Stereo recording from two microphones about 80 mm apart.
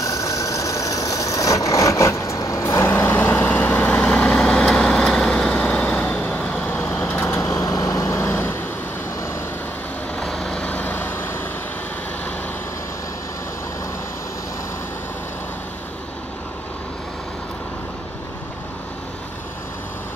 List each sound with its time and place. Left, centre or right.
0.0 s vehicle: left
8.2 s vehicle: left
10.1 s vehicle: centre; by 11.3 s left